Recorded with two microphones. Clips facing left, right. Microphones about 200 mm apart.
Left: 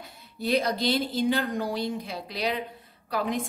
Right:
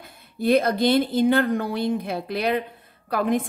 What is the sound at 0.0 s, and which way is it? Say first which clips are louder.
Speech: right 7 dB; 55° right (ahead or behind).